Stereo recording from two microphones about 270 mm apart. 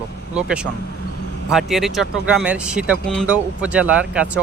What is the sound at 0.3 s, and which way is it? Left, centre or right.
Speech, centre.